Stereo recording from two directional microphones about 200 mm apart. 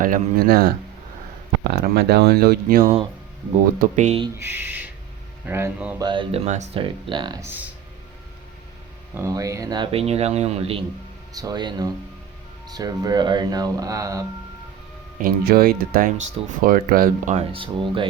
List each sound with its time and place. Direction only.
0.0 s speech: 45° right (ahead or behind)
3.8 s speech: 35° right (ahead or behind)
4.4 s speech: 10° right (ahead or behind)
6.0 s speech: 25° right (ahead or behind)
7.1 s speech: 25° right (ahead or behind)
7.4 s speech: 10° right (ahead or behind)
9.1 s speech: 15° right (ahead or behind)
15.2 s speech: 50° right (ahead or behind)
17.3 s speech: 25° right (ahead or behind)